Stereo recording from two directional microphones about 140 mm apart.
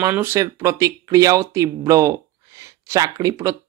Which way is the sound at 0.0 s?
20° right (ahead or behind).